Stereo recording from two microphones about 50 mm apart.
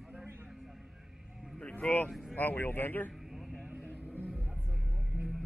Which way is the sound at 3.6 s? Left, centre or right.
Right.